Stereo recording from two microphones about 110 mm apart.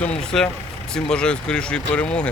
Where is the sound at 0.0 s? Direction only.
10° left (ahead or behind).